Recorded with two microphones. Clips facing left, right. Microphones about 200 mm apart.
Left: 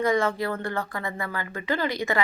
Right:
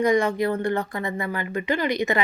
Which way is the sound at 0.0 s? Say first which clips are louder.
Right 3 dB; 15° right (ahead or behind).